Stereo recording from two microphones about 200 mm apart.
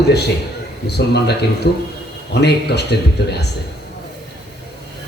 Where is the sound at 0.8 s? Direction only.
55° left (ahead or behind).